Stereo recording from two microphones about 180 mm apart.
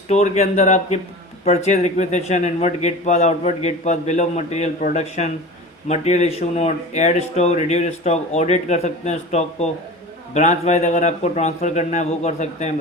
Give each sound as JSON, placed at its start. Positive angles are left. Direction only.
{"t": 0.1, "sound": "speech", "side_deg": 40}